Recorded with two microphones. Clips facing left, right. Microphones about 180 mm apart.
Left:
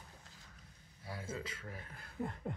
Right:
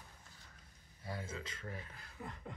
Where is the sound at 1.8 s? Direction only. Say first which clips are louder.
Left 7 dB; 50° left (ahead or behind).